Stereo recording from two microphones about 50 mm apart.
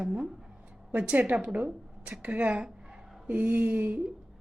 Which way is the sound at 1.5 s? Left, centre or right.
Right.